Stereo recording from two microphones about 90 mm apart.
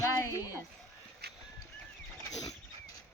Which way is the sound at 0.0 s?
35° left (ahead or behind).